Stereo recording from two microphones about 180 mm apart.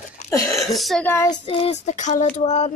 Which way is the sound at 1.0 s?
15° left (ahead or behind).